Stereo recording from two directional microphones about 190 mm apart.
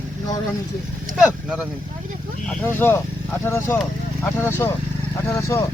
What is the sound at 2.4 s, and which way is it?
Speech, 10° left (ahead or behind).